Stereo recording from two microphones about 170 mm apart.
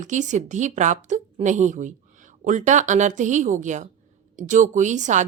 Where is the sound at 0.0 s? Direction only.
45° right (ahead or behind).